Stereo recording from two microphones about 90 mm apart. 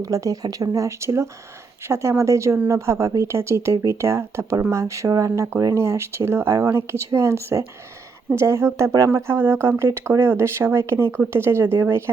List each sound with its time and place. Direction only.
0.0 s speech: 40° right (ahead or behind)